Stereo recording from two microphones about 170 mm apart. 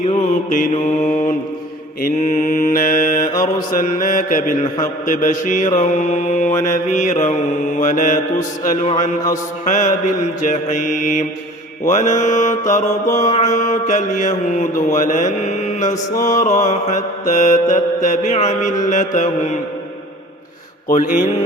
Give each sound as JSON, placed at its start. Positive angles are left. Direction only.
{"t": 0.0, "sound": "mantra", "side_deg": 45}
{"t": 6.5, "sound": "mantra", "side_deg": 15}
{"t": 6.9, "sound": "mantra", "side_deg": 45}
{"t": 20.8, "sound": "mantra", "side_deg": 50}